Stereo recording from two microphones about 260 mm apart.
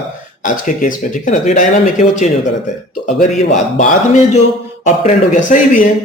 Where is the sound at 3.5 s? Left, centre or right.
Left.